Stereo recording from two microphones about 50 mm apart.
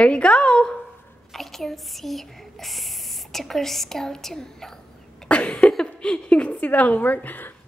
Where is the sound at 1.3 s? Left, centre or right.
Centre.